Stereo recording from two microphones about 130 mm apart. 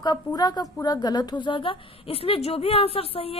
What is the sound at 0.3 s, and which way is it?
A woman's voice, 30° left (ahead or behind).